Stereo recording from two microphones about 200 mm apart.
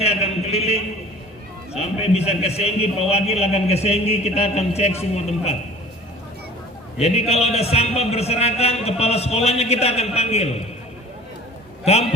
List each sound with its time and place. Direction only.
0.0 s a sound: 30° left (ahead or behind)
1.7 s a man's voice: 30° left (ahead or behind)
7.0 s a man's voice: 30° left (ahead or behind)